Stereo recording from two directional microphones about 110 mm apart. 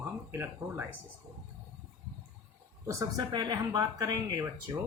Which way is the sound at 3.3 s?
40° right (ahead or behind).